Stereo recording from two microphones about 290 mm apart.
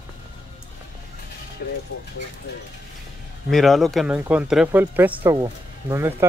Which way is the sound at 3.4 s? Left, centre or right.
Centre.